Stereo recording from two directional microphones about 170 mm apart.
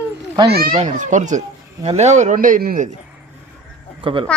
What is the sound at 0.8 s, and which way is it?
Speech, 45° right (ahead or behind).